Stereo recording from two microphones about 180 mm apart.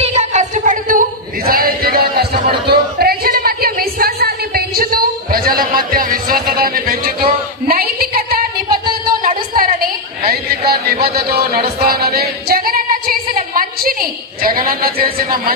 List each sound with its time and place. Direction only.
0.0 s singing: 40° right (ahead or behind)
10.6 s music: 60° right (ahead or behind)
14.4 s speech: 55° right (ahead or behind)